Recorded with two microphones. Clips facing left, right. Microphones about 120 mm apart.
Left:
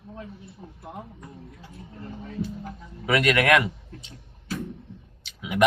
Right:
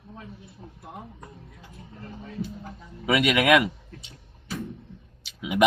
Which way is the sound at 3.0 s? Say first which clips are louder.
Even; 10° right (ahead or behind).